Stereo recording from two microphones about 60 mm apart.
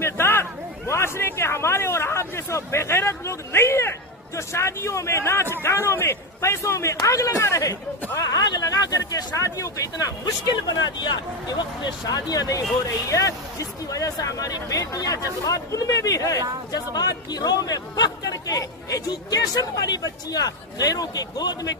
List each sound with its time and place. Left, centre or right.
0.0 s a man's voice: left
8.2 s speech: left
12.1 s speech: left
13.0 s speech: left
16.7 s speech: left